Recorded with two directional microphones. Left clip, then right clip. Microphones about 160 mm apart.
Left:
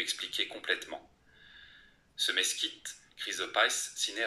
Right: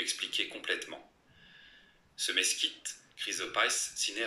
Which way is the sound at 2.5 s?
10° right (ahead or behind).